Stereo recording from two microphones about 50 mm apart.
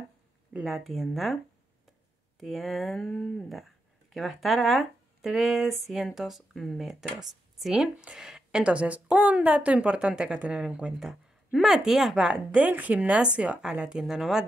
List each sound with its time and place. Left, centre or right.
0.7 s speech: centre
2.4 s speech: centre
3.0 s a sound: centre
4.1 s speech: centre
6.5 s a sound: centre
6.9 s a woman's voice: centre
12.2 s speech: centre
12.6 s a woman's voice: right; by 14.4 s centre